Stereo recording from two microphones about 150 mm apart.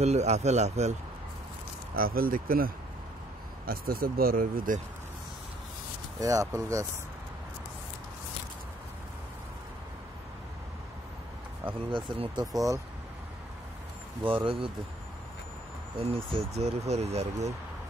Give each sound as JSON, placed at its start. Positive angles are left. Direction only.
{"t": 0.0, "sound": "speech", "side_deg": -45}
{"t": 2.0, "sound": "speech", "side_deg": -75}
{"t": 6.1, "sound": "speech", "side_deg": -20}
{"t": 11.9, "sound": "speech", "side_deg": -30}
{"t": 14.2, "sound": "speech", "side_deg": -35}
{"t": 16.0, "sound": "speech", "side_deg": -40}